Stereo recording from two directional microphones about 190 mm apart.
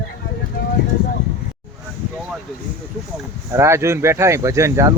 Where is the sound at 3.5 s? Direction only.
15° right (ahead or behind).